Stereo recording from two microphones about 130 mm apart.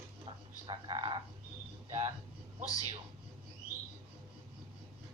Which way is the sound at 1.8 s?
50° right (ahead or behind).